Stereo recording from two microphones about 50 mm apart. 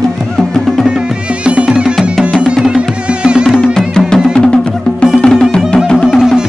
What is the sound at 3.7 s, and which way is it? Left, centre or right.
Music, centre.